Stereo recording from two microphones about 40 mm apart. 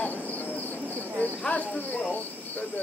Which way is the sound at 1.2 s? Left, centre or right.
Left.